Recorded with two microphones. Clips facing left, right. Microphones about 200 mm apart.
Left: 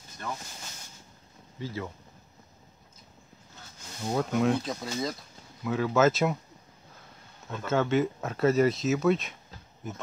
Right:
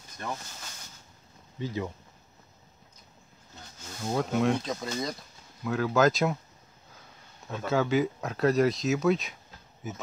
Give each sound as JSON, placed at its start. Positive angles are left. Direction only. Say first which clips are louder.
{"t": 1.6, "sound": "speech", "louder": "right 3 dB", "side_deg": -20}
{"t": 4.0, "sound": "speech", "louder": "even", "side_deg": 0}
{"t": 7.4, "sound": "speech", "louder": "even", "side_deg": 0}